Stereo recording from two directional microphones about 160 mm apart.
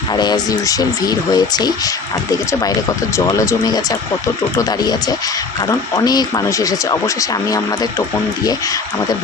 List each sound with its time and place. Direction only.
0.1 s speech: 25° left (ahead or behind)